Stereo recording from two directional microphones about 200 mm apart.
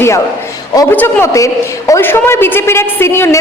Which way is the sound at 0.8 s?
10° left (ahead or behind).